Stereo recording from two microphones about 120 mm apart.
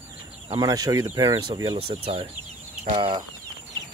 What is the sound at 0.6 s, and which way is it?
Speech, 35° right (ahead or behind).